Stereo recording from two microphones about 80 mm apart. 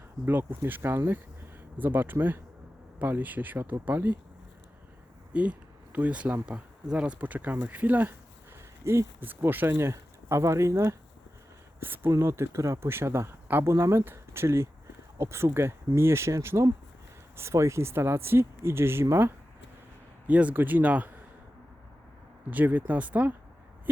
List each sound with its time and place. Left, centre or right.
0.3 s speech: right
5.3 s speech: centre
8.8 s speech: right
20.2 s speech: centre
22.4 s speech: right